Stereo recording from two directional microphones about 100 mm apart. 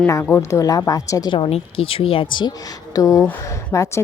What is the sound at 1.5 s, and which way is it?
Speech, 75° left (ahead or behind).